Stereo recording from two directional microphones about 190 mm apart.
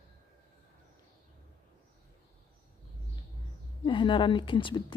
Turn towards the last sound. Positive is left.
turn(degrees=25)  # may be behind; listen again after turning